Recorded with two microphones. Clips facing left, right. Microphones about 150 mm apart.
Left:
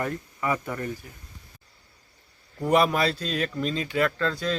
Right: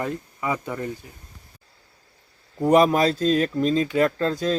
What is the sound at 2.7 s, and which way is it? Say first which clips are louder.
Speech: right 5 dB; 40° right (ahead or behind).